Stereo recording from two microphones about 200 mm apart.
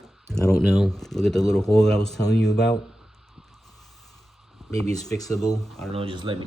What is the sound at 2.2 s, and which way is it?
Speech, 60° left (ahead or behind).